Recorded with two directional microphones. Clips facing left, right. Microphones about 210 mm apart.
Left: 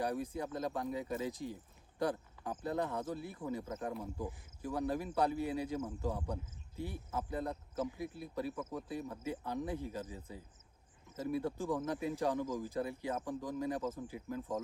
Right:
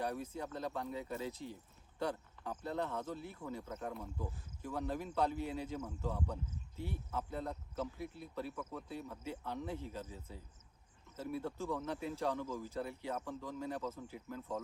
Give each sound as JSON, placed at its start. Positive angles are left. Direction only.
{"t": 0.0, "sound": "speech", "side_deg": 15}